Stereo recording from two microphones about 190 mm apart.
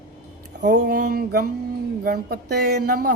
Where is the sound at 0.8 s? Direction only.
50° right (ahead or behind).